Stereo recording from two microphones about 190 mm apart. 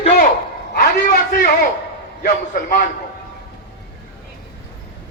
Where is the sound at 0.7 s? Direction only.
50° left (ahead or behind).